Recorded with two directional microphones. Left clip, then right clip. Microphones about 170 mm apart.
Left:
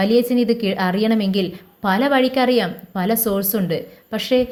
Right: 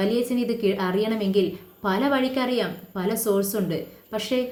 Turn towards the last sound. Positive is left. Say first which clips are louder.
# left 7 dB
turn(degrees=40)  # may be behind; listen again after turning